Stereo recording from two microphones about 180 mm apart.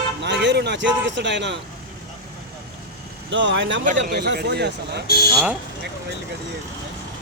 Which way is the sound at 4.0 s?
65° right (ahead or behind).